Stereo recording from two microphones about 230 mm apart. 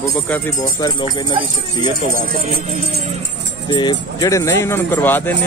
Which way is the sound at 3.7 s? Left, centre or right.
Centre.